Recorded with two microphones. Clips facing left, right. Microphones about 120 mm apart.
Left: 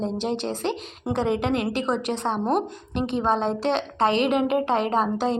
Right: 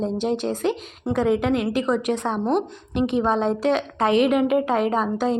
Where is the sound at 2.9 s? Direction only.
15° right (ahead or behind).